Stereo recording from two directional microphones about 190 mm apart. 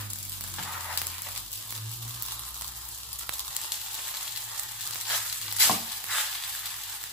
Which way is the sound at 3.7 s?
5° right (ahead or behind).